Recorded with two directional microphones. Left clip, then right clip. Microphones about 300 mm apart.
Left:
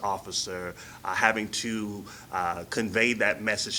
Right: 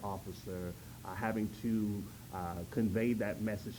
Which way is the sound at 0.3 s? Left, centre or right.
Centre.